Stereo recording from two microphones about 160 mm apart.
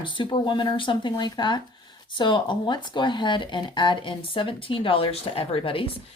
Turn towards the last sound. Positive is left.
turn(degrees=35)  # may be behind; listen again after turning